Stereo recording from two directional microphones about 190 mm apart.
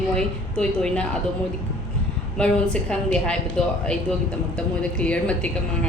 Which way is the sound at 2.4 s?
5° left (ahead or behind).